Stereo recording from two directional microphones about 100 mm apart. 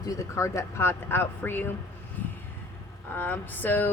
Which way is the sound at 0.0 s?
30° left (ahead or behind).